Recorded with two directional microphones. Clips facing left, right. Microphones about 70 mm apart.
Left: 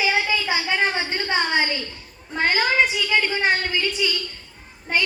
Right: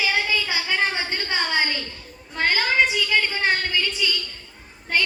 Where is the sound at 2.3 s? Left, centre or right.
Centre.